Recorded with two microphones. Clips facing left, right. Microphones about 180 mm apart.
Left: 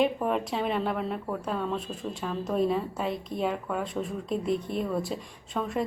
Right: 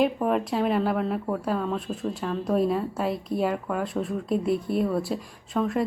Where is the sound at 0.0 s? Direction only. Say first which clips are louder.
Right 3 dB; centre (ahead or behind).